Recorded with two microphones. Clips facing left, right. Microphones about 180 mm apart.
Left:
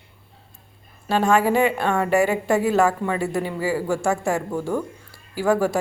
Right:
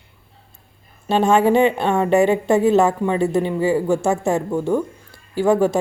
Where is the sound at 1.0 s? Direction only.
25° right (ahead or behind).